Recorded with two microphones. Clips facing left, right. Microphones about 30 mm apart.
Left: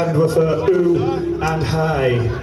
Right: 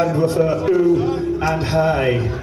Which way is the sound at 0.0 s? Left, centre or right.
Centre.